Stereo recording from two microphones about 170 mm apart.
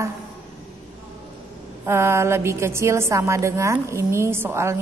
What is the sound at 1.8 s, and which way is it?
A woman's voice, 15° right (ahead or behind).